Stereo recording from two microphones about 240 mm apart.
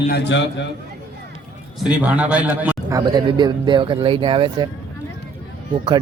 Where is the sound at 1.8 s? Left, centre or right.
Centre.